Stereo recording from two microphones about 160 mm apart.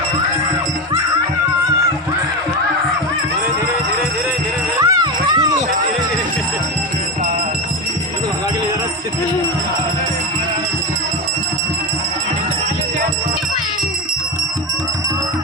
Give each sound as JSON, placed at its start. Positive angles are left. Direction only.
{"t": 4.8, "sound": "music", "side_deg": -25}